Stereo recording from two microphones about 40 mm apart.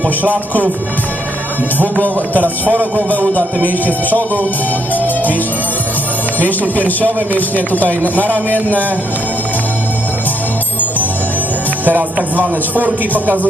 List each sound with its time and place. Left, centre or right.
1.8 s speech: left
5.0 s music: left
6.4 s speech: left
11.9 s speech: right